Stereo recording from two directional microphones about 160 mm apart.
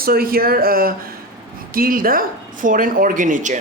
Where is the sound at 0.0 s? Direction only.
70° right (ahead or behind).